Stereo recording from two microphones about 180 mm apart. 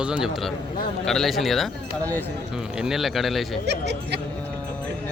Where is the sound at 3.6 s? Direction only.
70° right (ahead or behind).